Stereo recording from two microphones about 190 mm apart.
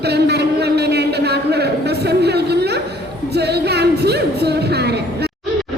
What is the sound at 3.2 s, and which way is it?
Music, 60° right (ahead or behind).